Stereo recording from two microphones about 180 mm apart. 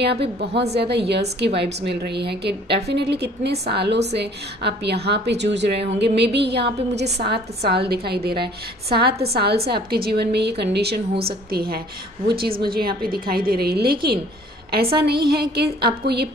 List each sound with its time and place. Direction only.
0.0 s a woman's voice: 65° right (ahead or behind)